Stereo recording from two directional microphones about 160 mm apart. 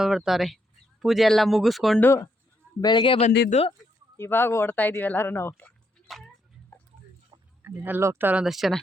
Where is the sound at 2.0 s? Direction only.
15° left (ahead or behind).